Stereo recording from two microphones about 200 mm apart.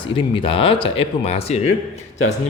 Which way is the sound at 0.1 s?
25° left (ahead or behind).